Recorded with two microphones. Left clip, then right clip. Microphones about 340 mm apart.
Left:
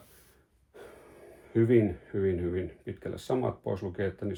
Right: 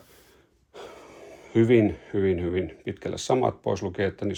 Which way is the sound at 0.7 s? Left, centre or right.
Centre.